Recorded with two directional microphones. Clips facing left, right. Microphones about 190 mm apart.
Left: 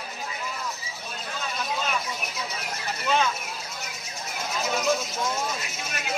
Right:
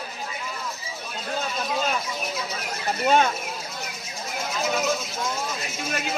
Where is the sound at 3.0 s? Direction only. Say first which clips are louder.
Right 5 dB; 50° right (ahead or behind).